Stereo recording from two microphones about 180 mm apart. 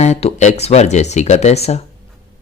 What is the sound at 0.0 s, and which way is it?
Speech, 35° left (ahead or behind).